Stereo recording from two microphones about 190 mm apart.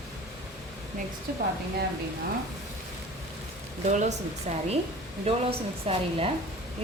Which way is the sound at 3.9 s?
40° right (ahead or behind).